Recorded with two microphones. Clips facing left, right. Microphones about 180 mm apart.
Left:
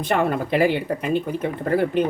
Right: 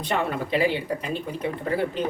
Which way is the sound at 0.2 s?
50° left (ahead or behind).